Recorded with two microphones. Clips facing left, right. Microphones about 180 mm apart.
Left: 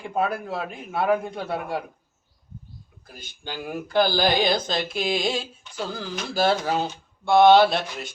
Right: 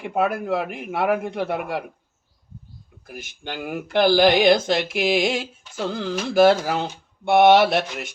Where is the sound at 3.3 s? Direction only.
75° right (ahead or behind).